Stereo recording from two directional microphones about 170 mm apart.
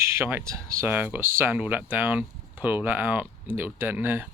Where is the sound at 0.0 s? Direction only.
15° right (ahead or behind).